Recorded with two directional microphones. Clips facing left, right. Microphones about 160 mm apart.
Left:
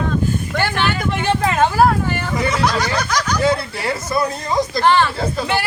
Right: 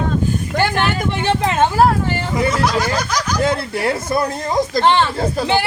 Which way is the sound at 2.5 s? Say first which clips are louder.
Left 1 dB; 5° right (ahead or behind).